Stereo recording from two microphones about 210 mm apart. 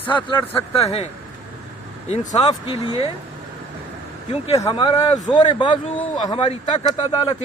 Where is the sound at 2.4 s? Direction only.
20° left (ahead or behind).